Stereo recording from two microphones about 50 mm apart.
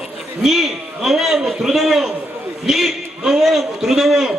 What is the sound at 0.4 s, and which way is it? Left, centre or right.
A man's voice, centre.